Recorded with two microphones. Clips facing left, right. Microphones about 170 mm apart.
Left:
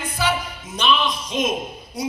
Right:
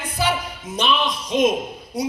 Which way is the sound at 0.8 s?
60° right (ahead or behind).